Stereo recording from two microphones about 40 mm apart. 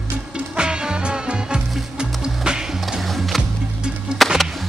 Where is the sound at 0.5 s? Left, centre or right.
Right.